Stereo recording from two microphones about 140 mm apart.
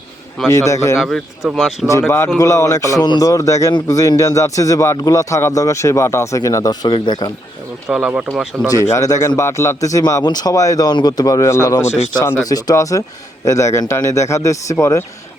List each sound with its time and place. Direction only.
0.4 s speech: 20° left (ahead or behind)
1.0 s speech: centre (ahead or behind)
1.9 s speech: 20° left (ahead or behind)
7.9 s speech: 5° right (ahead or behind)
8.7 s speech: 20° left (ahead or behind)